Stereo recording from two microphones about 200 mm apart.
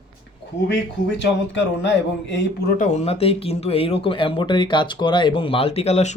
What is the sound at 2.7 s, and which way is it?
Speech, 35° left (ahead or behind).